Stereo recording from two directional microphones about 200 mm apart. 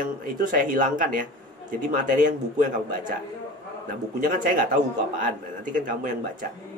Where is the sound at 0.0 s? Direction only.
40° right (ahead or behind).